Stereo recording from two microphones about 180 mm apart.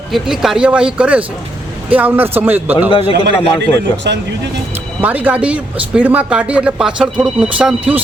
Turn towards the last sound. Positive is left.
turn(degrees=-5)  # may be behind; listen again after turning